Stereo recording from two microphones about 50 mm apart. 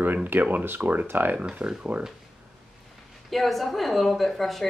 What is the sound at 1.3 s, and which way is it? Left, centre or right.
Speech, right.